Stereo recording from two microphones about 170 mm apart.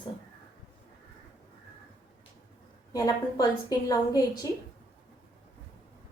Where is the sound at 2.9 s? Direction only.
20° left (ahead or behind).